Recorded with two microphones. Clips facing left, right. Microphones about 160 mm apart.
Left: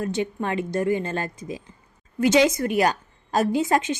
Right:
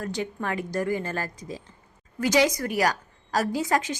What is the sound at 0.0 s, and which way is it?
A woman's voice, 20° left (ahead or behind).